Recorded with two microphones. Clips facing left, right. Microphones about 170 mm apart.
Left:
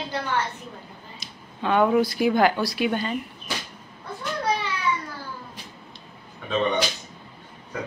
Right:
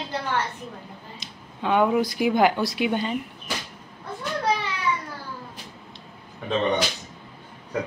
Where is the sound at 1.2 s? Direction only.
10° right (ahead or behind).